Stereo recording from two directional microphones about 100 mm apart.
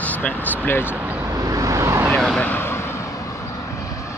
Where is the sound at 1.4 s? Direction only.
35° right (ahead or behind).